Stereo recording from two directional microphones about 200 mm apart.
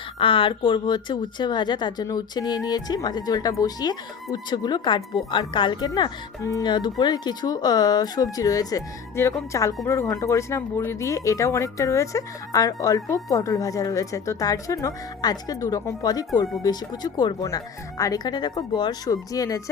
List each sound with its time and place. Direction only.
0.2 s speech: 25° left (ahead or behind)